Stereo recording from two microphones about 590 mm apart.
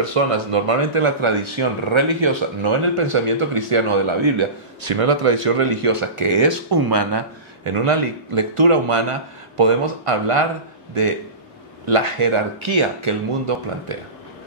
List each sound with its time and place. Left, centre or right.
0.1 s speech: right
7.6 s speech: right
11.8 s speech: right